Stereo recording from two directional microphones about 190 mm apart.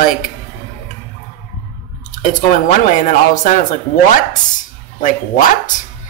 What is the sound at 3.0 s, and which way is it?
Speech, 40° left (ahead or behind).